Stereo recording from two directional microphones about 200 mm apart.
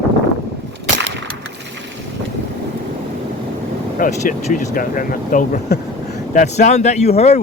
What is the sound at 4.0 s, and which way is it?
Speech, 40° left (ahead or behind).